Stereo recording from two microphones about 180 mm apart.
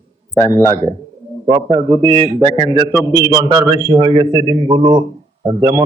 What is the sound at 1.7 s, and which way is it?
A man's voice, 30° right (ahead or behind).